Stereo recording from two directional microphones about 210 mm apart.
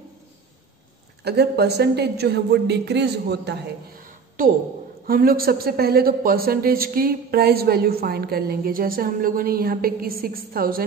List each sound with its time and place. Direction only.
1.2 s speech: 50° right (ahead or behind)